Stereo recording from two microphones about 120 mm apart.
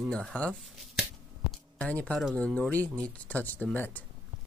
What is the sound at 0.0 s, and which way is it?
Speech, 5° left (ahead or behind).